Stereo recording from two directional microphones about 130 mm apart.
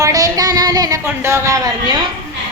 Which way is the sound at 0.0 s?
25° right (ahead or behind).